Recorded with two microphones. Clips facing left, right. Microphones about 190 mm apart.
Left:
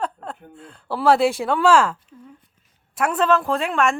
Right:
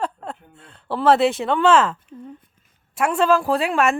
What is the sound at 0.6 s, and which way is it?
Speech, centre (ahead or behind).